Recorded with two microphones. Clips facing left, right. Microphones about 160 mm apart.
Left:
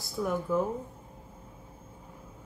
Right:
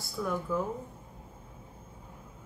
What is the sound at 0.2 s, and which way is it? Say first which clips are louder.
Speech: left 3 dB; 20° left (ahead or behind).